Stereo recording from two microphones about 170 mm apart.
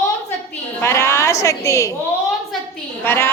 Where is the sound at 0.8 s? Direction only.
15° left (ahead or behind).